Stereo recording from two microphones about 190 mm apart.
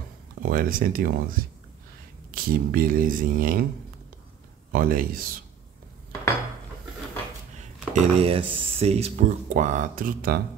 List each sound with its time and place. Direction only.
0.4 s speech: 50° right (ahead or behind)
4.7 s speech: 50° right (ahead or behind)
7.9 s speech: 30° right (ahead or behind); by 10.4 s 50° right (ahead or behind)